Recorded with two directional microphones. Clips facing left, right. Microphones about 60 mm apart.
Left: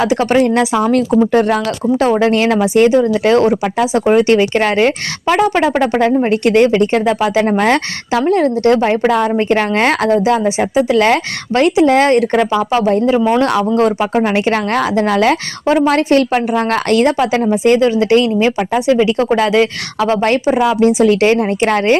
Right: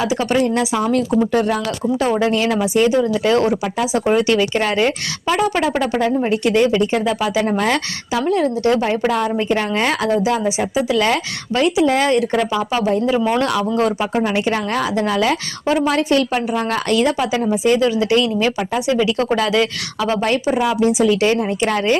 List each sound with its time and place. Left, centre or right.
0.0 s speech: left
20.0 s speech: left